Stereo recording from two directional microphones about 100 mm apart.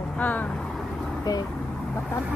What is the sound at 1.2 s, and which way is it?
Speech, 40° left (ahead or behind).